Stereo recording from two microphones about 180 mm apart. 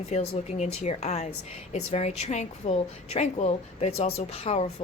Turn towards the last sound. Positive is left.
turn(degrees=35)  # may be behind; listen again after turning